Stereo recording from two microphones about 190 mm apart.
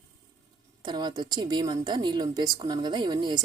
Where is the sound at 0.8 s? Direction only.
25° right (ahead or behind).